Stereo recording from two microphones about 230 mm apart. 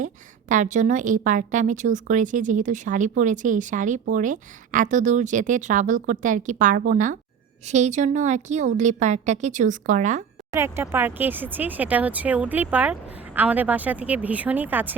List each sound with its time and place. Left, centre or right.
0.0 s a woman's voice: right
10.5 s speech: centre